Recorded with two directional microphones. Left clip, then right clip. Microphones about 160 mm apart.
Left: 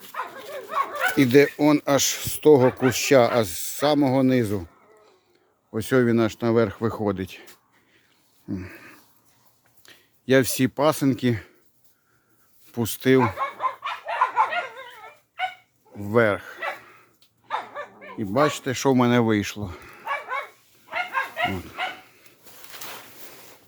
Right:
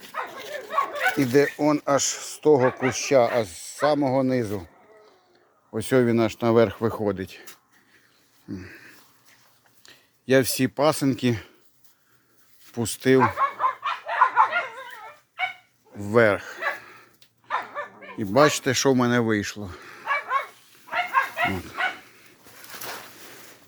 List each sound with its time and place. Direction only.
1.1 s speech: 45° left (ahead or behind)
5.7 s speech: 20° left (ahead or behind)
8.4 s a sound: 45° left (ahead or behind)
9.8 s speech: 30° left (ahead or behind)
12.7 s speech: 25° left (ahead or behind)
13.2 s a sound: centre (ahead or behind)
16.0 s bow-wow: 5° left (ahead or behind)
18.9 s speech: 20° left (ahead or behind); by 20.4 s 5° left (ahead or behind)
20.8 s dog: centre (ahead or behind)